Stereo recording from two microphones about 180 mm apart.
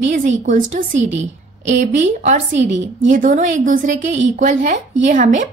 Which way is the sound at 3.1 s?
45° right (ahead or behind).